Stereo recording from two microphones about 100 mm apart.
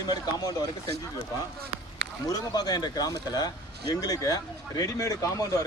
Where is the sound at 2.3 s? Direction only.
40° left (ahead or behind).